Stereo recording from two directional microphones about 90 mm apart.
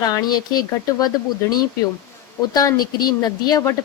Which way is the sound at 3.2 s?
45° left (ahead or behind).